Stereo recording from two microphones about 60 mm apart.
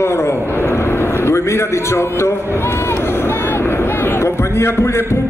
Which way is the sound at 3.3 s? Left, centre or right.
Left.